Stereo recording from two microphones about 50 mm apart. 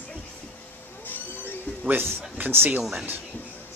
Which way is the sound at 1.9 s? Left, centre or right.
Right.